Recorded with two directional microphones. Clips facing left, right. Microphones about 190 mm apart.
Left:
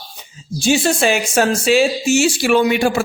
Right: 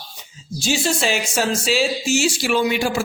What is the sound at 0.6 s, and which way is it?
A man's voice, 55° left (ahead or behind).